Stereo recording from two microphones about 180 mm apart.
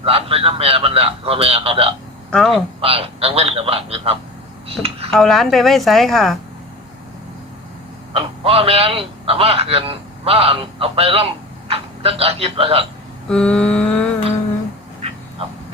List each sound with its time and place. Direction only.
0.0 s a man's voice: 35° right (ahead or behind)
2.3 s a woman's voice: centre (ahead or behind)
2.8 s a man's voice: 35° right (ahead or behind)
5.1 s a woman's voice: centre (ahead or behind)
8.1 s a man's voice: 30° right (ahead or behind)
13.2 s a woman's voice: 5° left (ahead or behind)